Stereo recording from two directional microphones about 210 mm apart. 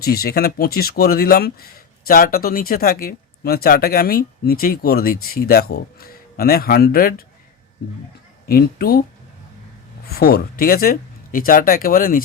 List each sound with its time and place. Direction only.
0.0 s speech: 45° left (ahead or behind)
8.4 s speech: 45° left (ahead or behind)
10.1 s speech: 45° left (ahead or behind)